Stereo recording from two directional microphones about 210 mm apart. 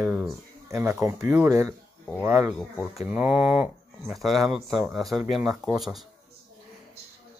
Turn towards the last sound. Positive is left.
turn(degrees=0)  # may be behind; listen again after turning